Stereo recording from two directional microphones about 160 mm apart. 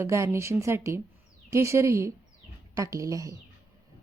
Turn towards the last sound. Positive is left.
turn(degrees=-20)  # may be behind; listen again after turning